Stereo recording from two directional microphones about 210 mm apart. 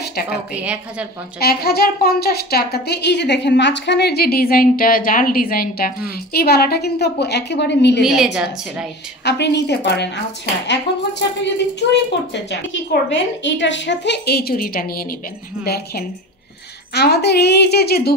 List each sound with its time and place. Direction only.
0.0 s a sound: 50° left (ahead or behind)
0.6 s a woman's voice: 5° right (ahead or behind)
1.4 s speech: 45° left (ahead or behind)
8.0 s a woman's voice: centre (ahead or behind)
9.2 s a woman's voice: 55° left (ahead or behind)
13.1 s speech: 60° left (ahead or behind)